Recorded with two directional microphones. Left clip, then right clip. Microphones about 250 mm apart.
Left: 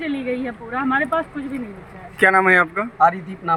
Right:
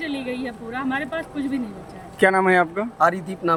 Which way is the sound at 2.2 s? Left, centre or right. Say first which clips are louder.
Left 3 dB; centre.